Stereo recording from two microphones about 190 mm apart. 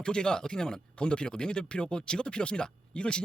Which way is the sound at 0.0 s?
5° left (ahead or behind).